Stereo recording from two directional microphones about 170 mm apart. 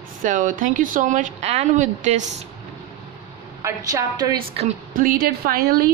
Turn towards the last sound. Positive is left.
turn(degrees=-60)  # may be behind; listen again after turning